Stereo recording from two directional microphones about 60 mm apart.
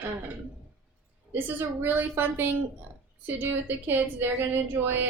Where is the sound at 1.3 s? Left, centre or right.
Right.